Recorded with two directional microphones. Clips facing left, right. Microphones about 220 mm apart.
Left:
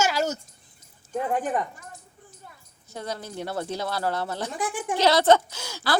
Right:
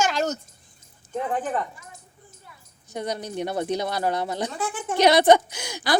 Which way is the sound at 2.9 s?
20° right (ahead or behind).